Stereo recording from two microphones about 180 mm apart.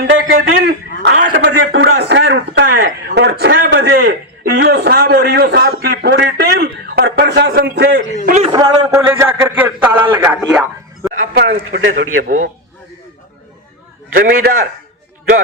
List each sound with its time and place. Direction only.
0.0 s a man's voice: 60° right (ahead or behind)
1.4 s a man's voice: 70° right (ahead or behind)
8.3 s a man's voice: 35° right (ahead or behind)
8.5 s a man's voice: 15° right (ahead or behind)
11.2 s a man's voice: 80° right
14.1 s a man's voice: 55° right (ahead or behind)